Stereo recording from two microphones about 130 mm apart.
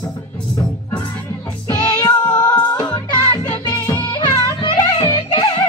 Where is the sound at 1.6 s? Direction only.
35° left (ahead or behind).